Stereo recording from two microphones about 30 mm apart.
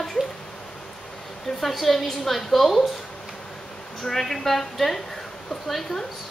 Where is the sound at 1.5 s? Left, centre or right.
Centre.